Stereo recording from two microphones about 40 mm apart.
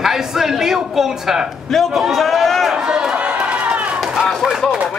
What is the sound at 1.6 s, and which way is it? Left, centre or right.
A man's voice, centre.